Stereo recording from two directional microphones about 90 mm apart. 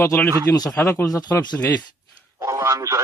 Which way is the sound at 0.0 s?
25° left (ahead or behind).